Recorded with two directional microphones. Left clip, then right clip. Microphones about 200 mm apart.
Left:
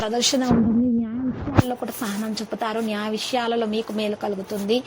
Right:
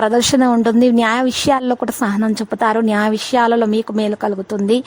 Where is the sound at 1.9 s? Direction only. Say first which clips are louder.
Right 10 dB; 35° right (ahead or behind).